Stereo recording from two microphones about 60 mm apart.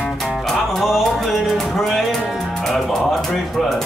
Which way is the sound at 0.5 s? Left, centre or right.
Centre.